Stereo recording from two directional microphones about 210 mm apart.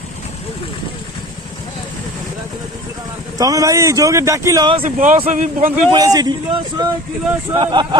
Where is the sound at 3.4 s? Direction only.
15° right (ahead or behind).